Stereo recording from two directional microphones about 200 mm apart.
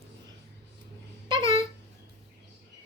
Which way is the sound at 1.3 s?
25° right (ahead or behind).